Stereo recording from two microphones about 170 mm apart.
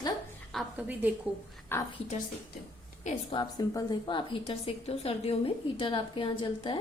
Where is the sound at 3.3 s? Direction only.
20° left (ahead or behind).